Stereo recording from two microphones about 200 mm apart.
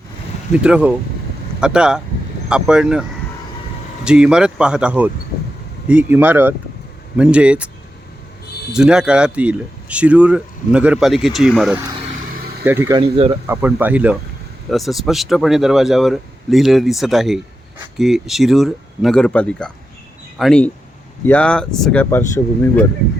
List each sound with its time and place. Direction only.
0.5 s speech: 5° right (ahead or behind)
8.7 s speech: 5° right (ahead or behind)
12.6 s speech: 10° right (ahead or behind)
13.0 s speech: 25° right (ahead or behind)
13.5 s speech: 10° right (ahead or behind); by 22.3 s 10° left (ahead or behind)